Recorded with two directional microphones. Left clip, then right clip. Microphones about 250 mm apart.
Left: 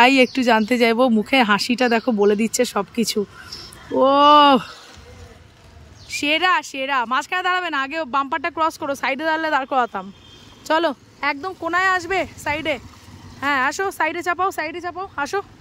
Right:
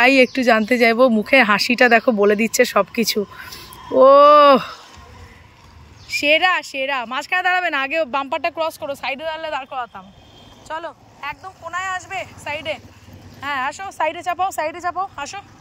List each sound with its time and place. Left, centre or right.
0.0 s speech: centre
6.0 s speech: centre
11.2 s speech: left; by 15.4 s centre